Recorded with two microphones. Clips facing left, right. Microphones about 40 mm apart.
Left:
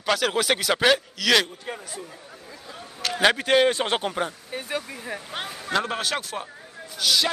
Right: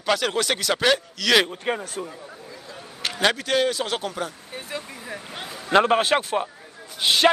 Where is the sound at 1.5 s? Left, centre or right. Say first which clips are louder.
Right 8 dB; right.